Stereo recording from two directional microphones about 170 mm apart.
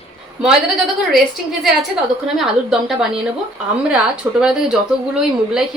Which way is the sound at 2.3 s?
Centre (ahead or behind).